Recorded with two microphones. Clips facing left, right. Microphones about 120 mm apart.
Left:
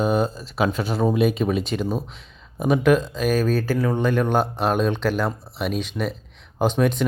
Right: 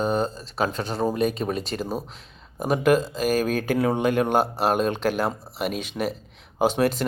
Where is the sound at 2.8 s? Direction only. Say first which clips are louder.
Right 1 dB; 40° right (ahead or behind).